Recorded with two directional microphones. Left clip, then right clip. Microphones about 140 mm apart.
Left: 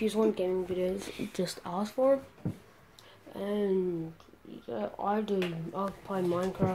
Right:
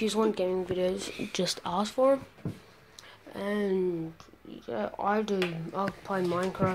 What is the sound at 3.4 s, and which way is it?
A woman's voice, 15° right (ahead or behind).